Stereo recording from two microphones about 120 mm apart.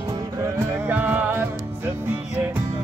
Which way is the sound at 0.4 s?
15° right (ahead or behind).